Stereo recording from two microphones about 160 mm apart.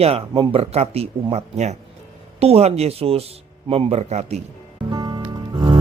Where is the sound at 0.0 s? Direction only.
35° right (ahead or behind).